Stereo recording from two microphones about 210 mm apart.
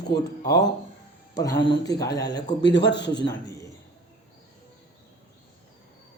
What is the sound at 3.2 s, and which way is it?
Speech, 15° left (ahead or behind).